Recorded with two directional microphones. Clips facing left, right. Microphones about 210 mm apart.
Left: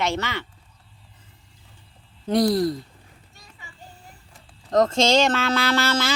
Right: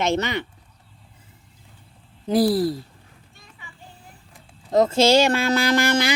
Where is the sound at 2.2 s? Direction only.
5° right (ahead or behind).